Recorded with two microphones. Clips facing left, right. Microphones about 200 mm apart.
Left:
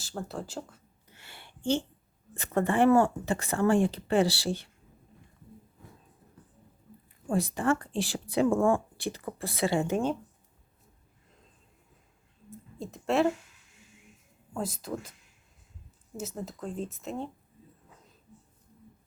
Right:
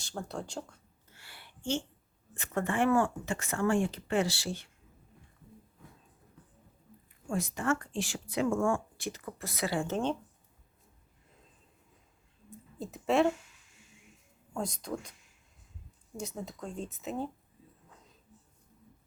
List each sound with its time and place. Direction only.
0.0 s speech: 5° left (ahead or behind)
1.0 s a sound: 20° left (ahead or behind)
2.3 s a woman's voice: 35° left (ahead or behind)
7.3 s a woman's voice: 35° left (ahead or behind)
9.8 s speech: 10° left (ahead or behind)
12.5 s a sound: centre (ahead or behind)
14.5 s speech: 5° left (ahead or behind)
16.1 s speech: centre (ahead or behind)